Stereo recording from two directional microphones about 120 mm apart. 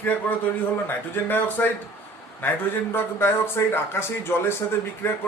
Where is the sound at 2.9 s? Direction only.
20° left (ahead or behind).